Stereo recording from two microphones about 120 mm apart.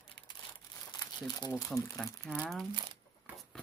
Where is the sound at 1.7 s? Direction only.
5° left (ahead or behind).